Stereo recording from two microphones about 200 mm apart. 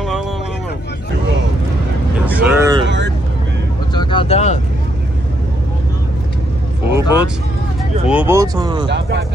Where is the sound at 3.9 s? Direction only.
25° left (ahead or behind).